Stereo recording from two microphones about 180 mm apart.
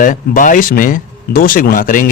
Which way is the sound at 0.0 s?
45° left (ahead or behind).